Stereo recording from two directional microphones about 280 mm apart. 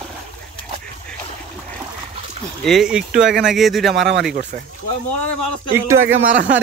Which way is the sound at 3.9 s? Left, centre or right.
Right.